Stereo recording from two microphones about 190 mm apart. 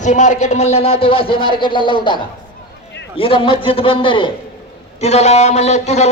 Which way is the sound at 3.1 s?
30° left (ahead or behind).